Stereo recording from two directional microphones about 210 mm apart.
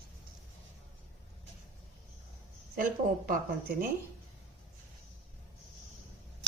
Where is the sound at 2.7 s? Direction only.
40° right (ahead or behind).